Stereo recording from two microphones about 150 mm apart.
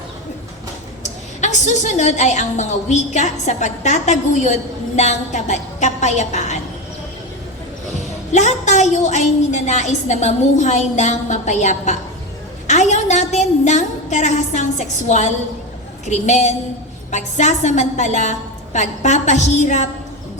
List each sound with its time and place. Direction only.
1.4 s a woman's voice: 50° left (ahead or behind)
7.9 s a woman's voice: 50° left (ahead or behind)